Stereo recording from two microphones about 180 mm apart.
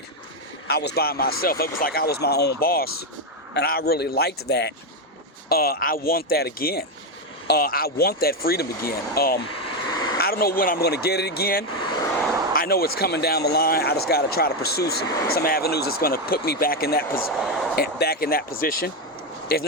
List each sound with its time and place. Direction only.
0.7 s speech: 65° left (ahead or behind)
9.8 s vehicle: 25° left (ahead or behind)
10.2 s speech: 60° left (ahead or behind)
11.8 s vehicle: 25° left (ahead or behind)
12.5 s speech: 55° left (ahead or behind)
17.3 s speech: centre (ahead or behind)
17.7 s speech: 60° left (ahead or behind)